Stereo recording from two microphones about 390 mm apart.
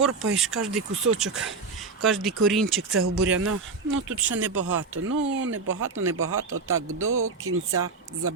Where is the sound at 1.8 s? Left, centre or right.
Centre.